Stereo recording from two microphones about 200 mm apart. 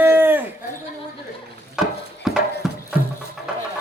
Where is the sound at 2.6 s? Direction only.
Centre (ahead or behind).